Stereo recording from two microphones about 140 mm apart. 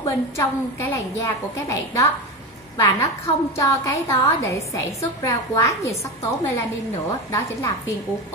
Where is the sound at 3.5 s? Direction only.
25° left (ahead or behind).